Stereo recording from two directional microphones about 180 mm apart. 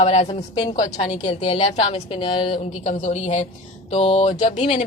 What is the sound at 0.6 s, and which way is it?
Speech, 25° left (ahead or behind).